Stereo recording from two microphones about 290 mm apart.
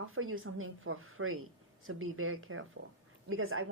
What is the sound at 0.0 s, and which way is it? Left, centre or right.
Speech, right.